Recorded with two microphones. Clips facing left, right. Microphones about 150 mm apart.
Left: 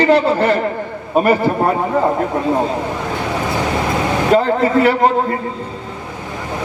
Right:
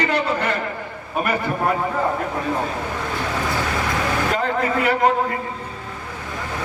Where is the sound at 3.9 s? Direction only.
30° left (ahead or behind).